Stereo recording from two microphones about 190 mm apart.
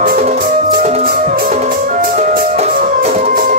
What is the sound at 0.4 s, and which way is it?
Music, 50° right (ahead or behind).